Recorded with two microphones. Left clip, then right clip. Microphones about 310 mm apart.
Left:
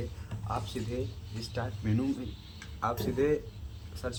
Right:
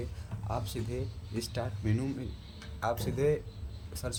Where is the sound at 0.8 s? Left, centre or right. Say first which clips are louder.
Left 2 dB; right.